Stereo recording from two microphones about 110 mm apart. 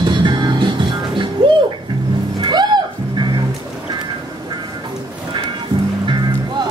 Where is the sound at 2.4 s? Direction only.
40° right (ahead or behind).